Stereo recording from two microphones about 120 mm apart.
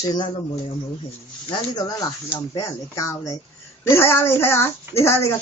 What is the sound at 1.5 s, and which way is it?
Speech, 35° left (ahead or behind).